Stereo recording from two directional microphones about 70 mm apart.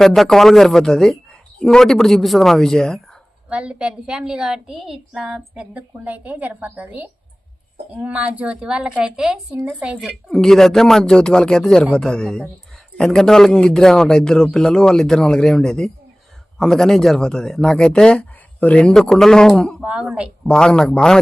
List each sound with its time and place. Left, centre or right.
0.0 s speech: centre
3.5 s a woman's voice: centre
5.7 s a woman's voice: right
10.2 s a man's voice: centre
19.8 s a woman's voice: centre
20.5 s a man's voice: centre